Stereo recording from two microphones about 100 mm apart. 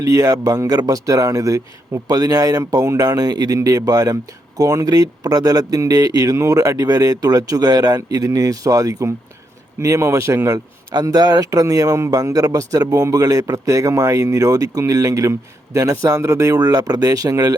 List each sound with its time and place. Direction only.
0.0 s a man's voice: 35° right (ahead or behind)
10.9 s speech: 40° right (ahead or behind)